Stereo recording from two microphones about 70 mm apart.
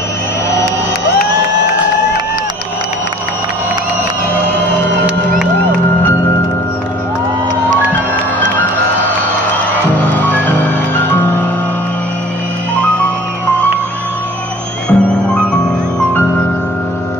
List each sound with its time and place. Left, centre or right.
9.9 s music: left
14.9 s music: centre